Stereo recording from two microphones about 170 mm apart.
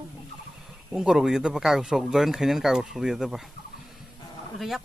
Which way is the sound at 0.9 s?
5° right (ahead or behind).